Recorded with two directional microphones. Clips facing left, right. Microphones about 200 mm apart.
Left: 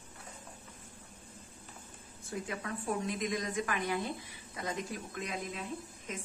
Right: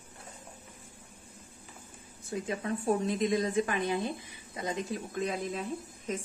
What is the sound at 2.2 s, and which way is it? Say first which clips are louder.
A woman's voice: right 5 dB; 25° right (ahead or behind).